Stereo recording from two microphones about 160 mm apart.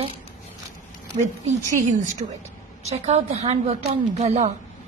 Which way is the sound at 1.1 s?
40° right (ahead or behind).